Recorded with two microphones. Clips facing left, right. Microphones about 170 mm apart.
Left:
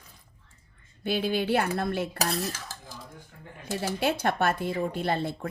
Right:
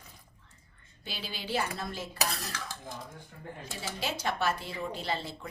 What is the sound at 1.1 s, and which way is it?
Speech, 55° left (ahead or behind).